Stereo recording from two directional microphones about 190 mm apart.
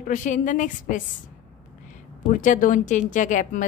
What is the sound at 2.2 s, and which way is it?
A woman's voice, 40° left (ahead or behind).